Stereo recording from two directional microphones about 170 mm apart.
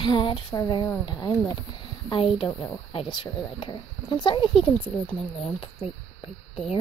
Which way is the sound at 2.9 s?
30° left (ahead or behind).